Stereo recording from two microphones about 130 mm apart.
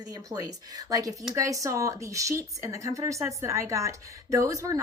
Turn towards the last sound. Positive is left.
turn(degrees=-25)  # may be behind; listen again after turning